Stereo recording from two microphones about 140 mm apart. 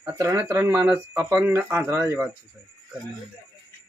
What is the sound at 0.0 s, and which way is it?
Speech, 20° right (ahead or behind).